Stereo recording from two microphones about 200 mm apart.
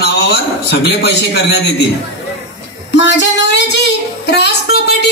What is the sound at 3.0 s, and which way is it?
A man's voice, 65° left (ahead or behind).